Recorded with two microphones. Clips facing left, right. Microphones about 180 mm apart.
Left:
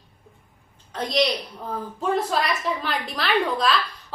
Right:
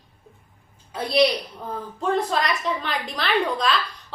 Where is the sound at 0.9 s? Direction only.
10° right (ahead or behind).